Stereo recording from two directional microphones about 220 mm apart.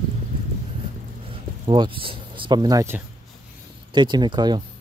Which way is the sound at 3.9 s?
20° right (ahead or behind).